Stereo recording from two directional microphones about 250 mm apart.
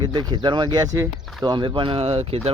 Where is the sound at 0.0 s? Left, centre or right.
Centre.